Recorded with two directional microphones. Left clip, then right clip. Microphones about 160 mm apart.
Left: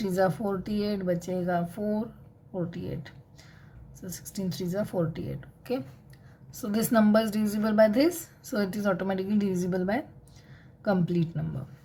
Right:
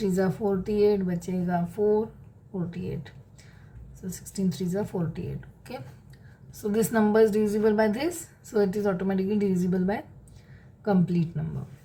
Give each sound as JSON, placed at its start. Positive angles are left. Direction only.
{"t": 0.0, "sound": "a woman's voice", "side_deg": 35}
{"t": 6.5, "sound": "a woman's voice", "side_deg": 35}